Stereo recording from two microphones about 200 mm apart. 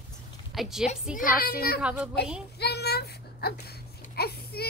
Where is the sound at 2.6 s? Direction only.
55° left (ahead or behind).